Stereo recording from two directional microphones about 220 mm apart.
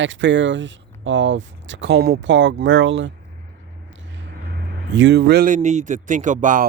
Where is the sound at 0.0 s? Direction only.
55° right (ahead or behind).